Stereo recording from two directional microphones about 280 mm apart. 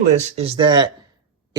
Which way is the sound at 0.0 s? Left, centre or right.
Right.